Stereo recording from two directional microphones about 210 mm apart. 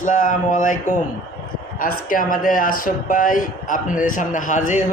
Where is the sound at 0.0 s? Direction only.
35° left (ahead or behind).